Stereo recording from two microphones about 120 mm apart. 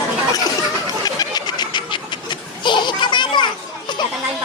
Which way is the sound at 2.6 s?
40° left (ahead or behind).